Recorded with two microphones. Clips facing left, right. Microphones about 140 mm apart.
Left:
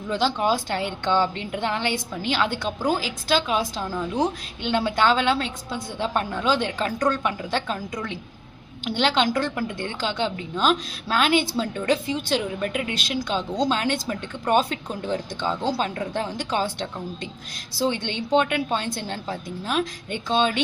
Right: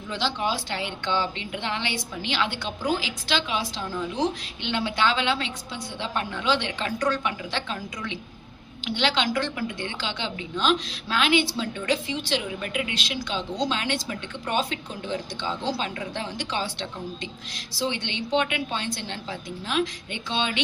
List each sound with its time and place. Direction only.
0.1 s a woman's voice: 45° left (ahead or behind)